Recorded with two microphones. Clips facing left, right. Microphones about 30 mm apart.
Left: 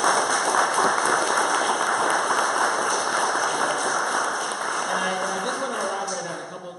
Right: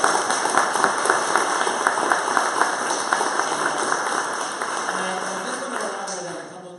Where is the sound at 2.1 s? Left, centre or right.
Centre.